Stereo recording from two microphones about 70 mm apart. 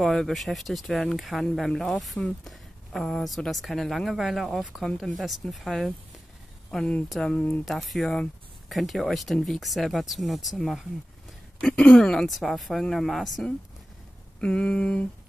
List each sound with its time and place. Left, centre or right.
0.0 s speech: centre
7.1 s mantra: centre
7.3 s speech: left
7.6 s speech: centre
11.6 s mantra: centre
11.9 s speech: centre
14.4 s mantra: centre